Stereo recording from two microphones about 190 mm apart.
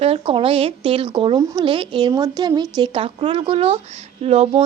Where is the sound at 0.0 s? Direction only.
30° right (ahead or behind).